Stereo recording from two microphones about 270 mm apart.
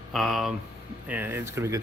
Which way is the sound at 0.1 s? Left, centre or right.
Centre.